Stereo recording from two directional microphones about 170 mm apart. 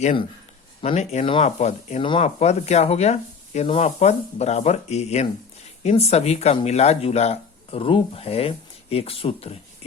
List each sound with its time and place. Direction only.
0.8 s speech: 40° left (ahead or behind)